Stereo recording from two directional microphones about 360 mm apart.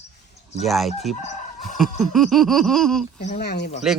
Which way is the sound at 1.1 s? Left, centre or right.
Centre.